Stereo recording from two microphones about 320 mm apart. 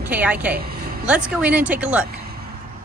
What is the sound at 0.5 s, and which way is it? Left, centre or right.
Speech, right.